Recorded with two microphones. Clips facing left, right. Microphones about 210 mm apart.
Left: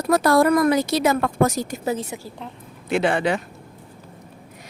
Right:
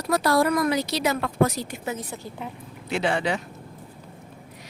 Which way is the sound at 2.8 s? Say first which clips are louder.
Left 4 dB; 55° left (ahead or behind).